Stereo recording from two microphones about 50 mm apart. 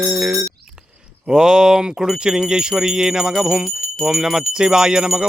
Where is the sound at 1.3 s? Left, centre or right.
Centre.